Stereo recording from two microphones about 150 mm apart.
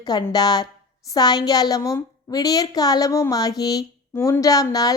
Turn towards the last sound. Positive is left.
turn(degrees=25)  # may be behind; listen again after turning